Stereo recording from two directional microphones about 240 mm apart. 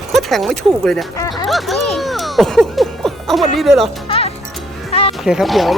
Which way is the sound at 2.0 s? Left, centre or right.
Centre.